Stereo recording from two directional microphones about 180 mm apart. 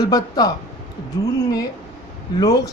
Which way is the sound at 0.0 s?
20° left (ahead or behind).